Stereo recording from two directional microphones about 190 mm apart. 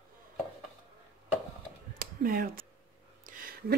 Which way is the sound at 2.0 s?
50° right (ahead or behind).